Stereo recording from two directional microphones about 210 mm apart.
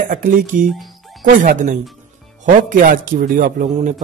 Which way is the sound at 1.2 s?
40° right (ahead or behind).